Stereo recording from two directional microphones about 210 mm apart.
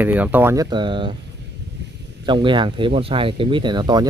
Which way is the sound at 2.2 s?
20° right (ahead or behind).